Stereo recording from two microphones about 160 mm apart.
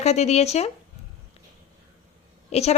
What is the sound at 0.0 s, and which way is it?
Speech, 45° left (ahead or behind).